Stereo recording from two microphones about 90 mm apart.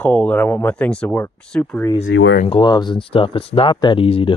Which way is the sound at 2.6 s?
55° left (ahead or behind).